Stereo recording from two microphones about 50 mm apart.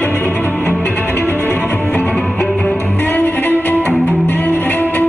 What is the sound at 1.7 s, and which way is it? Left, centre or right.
Music, left.